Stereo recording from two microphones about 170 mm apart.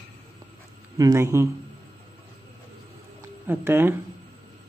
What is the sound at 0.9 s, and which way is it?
Speech, 20° right (ahead or behind).